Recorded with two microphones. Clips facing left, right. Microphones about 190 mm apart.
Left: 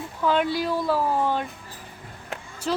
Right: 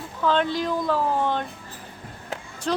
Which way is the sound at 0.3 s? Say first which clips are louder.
Even; 10° left (ahead or behind).